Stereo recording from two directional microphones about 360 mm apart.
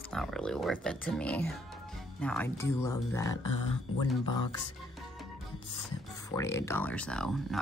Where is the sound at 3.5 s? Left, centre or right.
Left.